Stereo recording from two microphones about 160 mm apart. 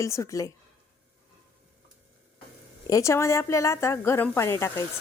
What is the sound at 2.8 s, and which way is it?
Speech, 20° left (ahead or behind).